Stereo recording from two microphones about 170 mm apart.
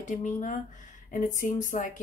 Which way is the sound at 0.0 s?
50° left (ahead or behind).